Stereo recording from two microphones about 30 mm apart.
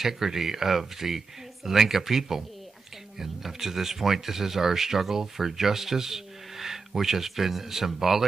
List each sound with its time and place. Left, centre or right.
0.0 s speech: centre